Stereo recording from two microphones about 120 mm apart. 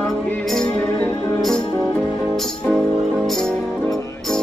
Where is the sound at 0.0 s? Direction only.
10° left (ahead or behind).